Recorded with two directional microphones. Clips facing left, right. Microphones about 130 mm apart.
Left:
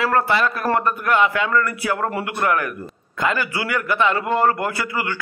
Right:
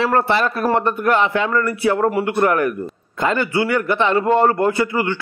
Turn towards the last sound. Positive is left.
turn(degrees=-25)  # may be behind; listen again after turning